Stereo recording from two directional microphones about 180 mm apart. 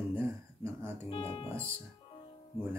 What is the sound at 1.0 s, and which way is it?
Speech, 30° left (ahead or behind).